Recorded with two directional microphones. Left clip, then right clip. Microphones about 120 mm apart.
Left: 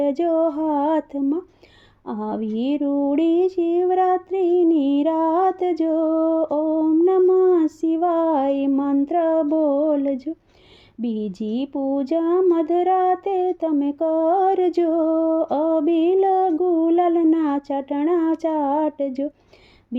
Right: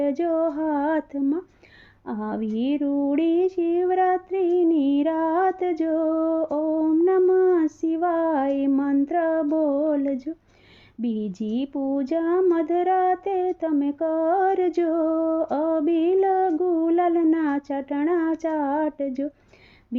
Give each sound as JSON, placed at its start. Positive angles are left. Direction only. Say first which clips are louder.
{"t": 0.0, "sound": "speech", "louder": "left 3 dB", "side_deg": 50}